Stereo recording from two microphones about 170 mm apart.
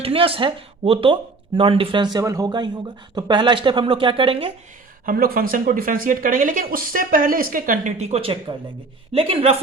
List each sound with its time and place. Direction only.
0.0 s speech: 35° right (ahead or behind)
2.1 s speech: 20° right (ahead or behind)
5.0 s a woman's voice: 60° right (ahead or behind); by 9.6 s 35° right (ahead or behind)